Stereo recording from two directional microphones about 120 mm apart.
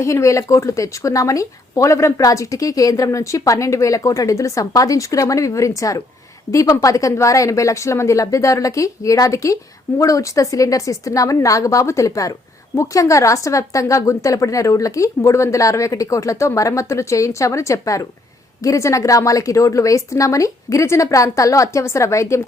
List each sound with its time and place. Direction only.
0.0 s speech: 25° left (ahead or behind)